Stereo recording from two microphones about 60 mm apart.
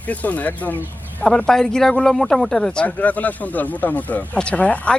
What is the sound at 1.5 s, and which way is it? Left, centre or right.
Speech, centre.